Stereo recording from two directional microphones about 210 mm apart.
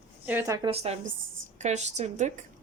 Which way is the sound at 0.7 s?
30° right (ahead or behind).